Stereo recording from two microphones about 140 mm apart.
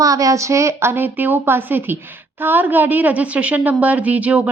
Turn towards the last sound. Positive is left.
turn(degrees=-10)  # may be behind; listen again after turning